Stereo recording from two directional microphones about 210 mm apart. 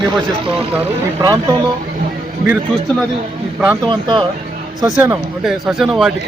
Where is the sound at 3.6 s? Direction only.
15° right (ahead or behind).